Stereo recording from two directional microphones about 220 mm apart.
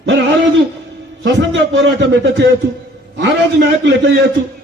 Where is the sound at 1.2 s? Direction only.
55° right (ahead or behind).